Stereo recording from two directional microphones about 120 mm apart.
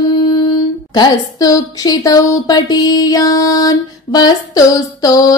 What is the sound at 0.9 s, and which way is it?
A woman's voice, 35° left (ahead or behind).